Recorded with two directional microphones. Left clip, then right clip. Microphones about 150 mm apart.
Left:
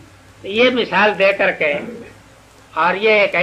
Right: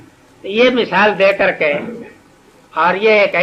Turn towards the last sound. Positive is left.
turn(degrees=30)  # may be behind; listen again after turning